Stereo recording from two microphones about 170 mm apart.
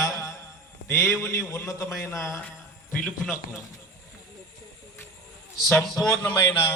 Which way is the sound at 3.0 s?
15° left (ahead or behind).